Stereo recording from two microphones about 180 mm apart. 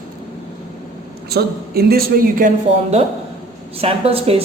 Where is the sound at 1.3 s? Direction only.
60° right (ahead or behind).